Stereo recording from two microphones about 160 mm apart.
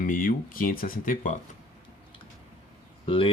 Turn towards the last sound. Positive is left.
turn(degrees=35)  # may be behind; listen again after turning